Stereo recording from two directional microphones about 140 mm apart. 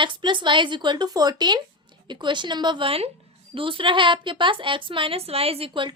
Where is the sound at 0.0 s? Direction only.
35° right (ahead or behind).